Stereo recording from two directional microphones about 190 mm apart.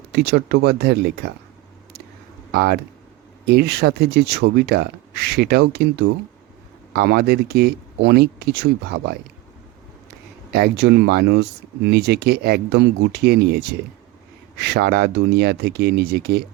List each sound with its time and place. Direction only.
0.1 s speech: 60° right (ahead or behind)
2.5 s speech: 55° right (ahead or behind)
10.5 s speech: 60° right (ahead or behind)